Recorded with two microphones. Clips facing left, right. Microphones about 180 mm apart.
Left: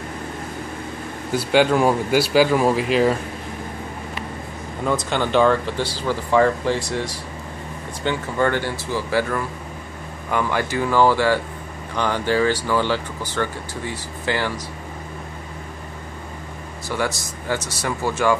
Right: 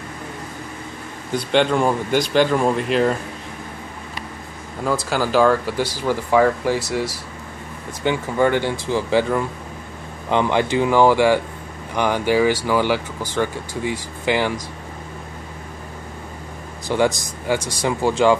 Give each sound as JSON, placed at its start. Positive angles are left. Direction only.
{"t": 1.3, "sound": "speech", "side_deg": 5}
{"t": 4.8, "sound": "speech", "side_deg": -5}
{"t": 8.0, "sound": "speech", "side_deg": -15}
{"t": 16.8, "sound": "speech", "side_deg": -20}